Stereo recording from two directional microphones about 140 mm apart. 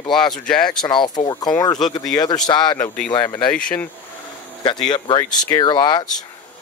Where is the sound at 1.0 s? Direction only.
30° left (ahead or behind).